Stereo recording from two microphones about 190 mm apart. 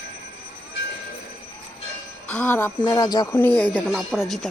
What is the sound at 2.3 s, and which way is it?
Speech, 10° left (ahead or behind).